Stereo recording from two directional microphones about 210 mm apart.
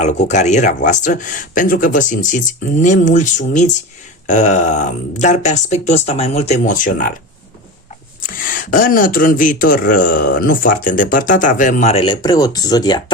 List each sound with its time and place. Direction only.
0.0 s speech: 35° left (ahead or behind)
8.4 s speech: 40° left (ahead or behind); by 13.1 s 20° left (ahead or behind)